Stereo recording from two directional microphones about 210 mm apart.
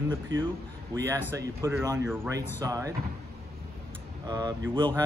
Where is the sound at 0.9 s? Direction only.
15° right (ahead or behind).